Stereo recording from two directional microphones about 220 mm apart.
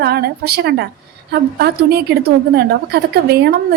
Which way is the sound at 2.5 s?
45° right (ahead or behind).